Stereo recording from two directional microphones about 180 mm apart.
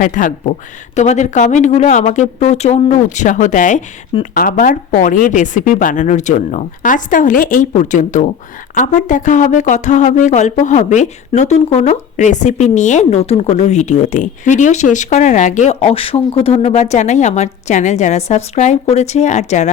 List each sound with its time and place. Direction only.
0.0 s a woman's voice: 45° left (ahead or behind)